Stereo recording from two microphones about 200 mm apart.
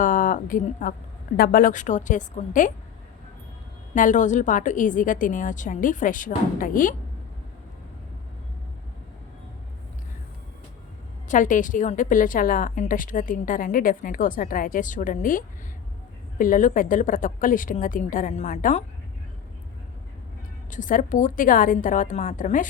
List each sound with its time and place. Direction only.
0.0 s a woman's voice: 40° left (ahead or behind)
3.9 s a woman's voice: 40° left (ahead or behind)
11.3 s a woman's voice: 40° left (ahead or behind)
20.7 s a woman's voice: 40° left (ahead or behind)